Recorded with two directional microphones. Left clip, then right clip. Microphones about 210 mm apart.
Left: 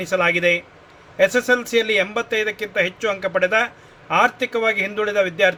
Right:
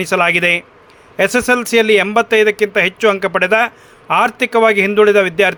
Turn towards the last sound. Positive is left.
turn(degrees=-55)  # may be behind; listen again after turning